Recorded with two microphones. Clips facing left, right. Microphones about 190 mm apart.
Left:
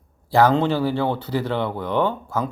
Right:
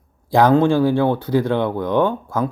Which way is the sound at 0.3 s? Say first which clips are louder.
Right 3 dB; 15° right (ahead or behind).